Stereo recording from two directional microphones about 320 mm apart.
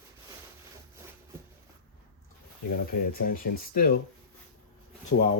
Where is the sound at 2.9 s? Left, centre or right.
Left.